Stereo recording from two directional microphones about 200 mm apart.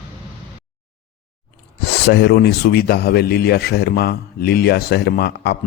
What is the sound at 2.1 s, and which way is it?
Speech, 55° left (ahead or behind).